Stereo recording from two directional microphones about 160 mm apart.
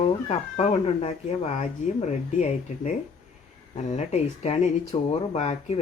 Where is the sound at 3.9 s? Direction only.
45° left (ahead or behind).